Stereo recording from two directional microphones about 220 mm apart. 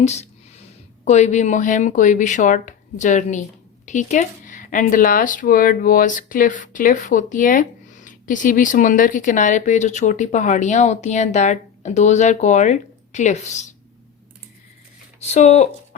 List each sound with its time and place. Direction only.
0.0 s a sound: 30° left (ahead or behind)
1.0 s speech: 30° left (ahead or behind)
15.2 s speech: 30° left (ahead or behind)